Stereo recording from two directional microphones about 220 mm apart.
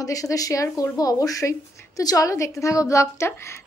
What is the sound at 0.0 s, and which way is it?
A woman's voice, 15° left (ahead or behind).